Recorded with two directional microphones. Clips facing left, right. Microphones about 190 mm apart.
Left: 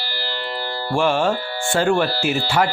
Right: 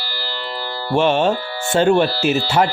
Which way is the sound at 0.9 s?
20° right (ahead or behind).